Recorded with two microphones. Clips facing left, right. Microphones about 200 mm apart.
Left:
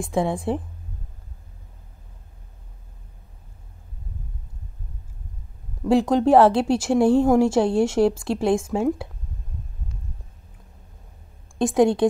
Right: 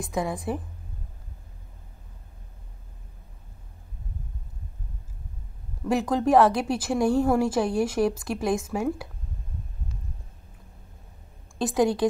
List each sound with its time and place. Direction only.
0.0 s speech: 30° left (ahead or behind)
5.9 s speech: 25° left (ahead or behind)
11.5 s a woman's voice: 25° left (ahead or behind)